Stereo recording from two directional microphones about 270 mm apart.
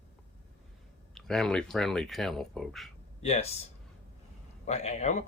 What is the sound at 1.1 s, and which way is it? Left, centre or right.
Speech, centre.